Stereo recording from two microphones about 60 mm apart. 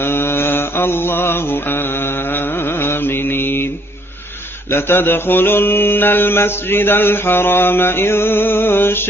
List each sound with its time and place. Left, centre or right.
0.0 s mantra: left
4.6 s mantra: left